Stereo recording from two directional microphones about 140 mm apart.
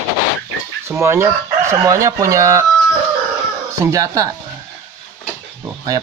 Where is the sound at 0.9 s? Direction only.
20° right (ahead or behind).